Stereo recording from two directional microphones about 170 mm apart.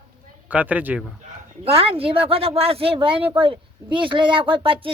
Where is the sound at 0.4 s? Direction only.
10° right (ahead or behind).